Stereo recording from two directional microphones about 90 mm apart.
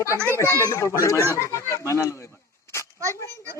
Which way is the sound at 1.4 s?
30° left (ahead or behind).